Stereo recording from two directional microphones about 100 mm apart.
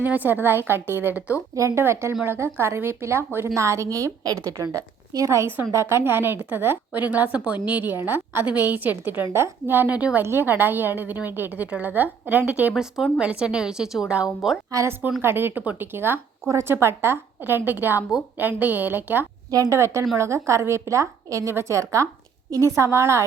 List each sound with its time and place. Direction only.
0.0 s a woman's voice: 15° right (ahead or behind)
12.7 s a woman's voice: 5° right (ahead or behind)
14.7 s a woman's voice: 30° right (ahead or behind)